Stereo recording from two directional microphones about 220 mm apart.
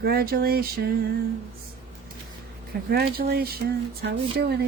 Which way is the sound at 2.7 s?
40° right (ahead or behind).